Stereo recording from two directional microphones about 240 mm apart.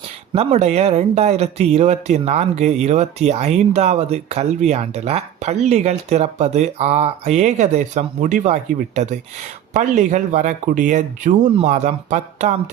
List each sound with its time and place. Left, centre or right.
0.3 s speech: right